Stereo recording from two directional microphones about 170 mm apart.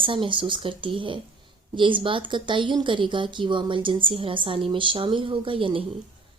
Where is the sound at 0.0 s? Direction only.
30° right (ahead or behind).